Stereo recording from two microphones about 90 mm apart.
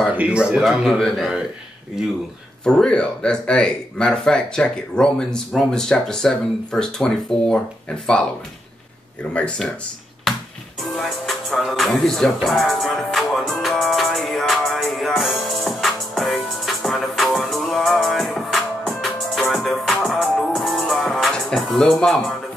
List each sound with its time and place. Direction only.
0.1 s a sound: 15° right (ahead or behind)
0.5 s a man's voice: 5° right (ahead or behind)
2.6 s speech: 10° left (ahead or behind)
9.3 s speech: 15° left (ahead or behind)
10.8 s music: centre (ahead or behind)